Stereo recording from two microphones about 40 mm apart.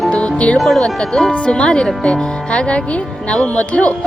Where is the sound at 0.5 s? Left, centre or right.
Centre.